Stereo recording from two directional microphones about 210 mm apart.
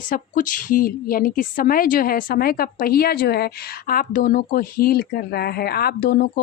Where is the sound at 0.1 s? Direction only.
40° left (ahead or behind).